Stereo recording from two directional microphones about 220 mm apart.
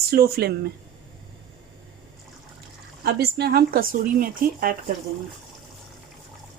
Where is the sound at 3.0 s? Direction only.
45° right (ahead or behind).